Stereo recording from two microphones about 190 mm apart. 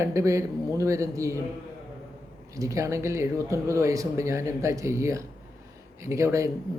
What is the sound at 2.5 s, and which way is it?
Speech, 15° right (ahead or behind).